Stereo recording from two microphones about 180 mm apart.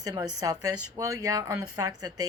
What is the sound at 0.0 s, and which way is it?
Speech, 20° right (ahead or behind).